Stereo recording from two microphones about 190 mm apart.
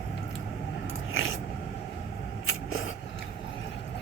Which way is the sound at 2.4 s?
90° left.